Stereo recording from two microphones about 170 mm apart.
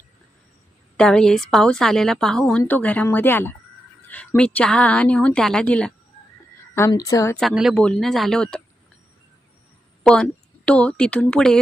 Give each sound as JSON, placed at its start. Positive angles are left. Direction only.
{"t": 0.9, "sound": "a woman's voice", "side_deg": 5}
{"t": 6.7, "sound": "a woman's voice", "side_deg": 20}
{"t": 7.3, "sound": "a woman's voice", "side_deg": 0}
{"t": 10.0, "sound": "a woman's voice", "side_deg": 5}